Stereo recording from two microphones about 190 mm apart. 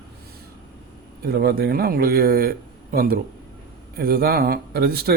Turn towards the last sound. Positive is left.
turn(degrees=-55)  # may be behind; listen again after turning